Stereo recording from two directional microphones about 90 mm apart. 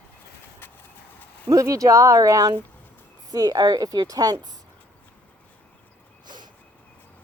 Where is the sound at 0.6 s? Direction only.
25° left (ahead or behind).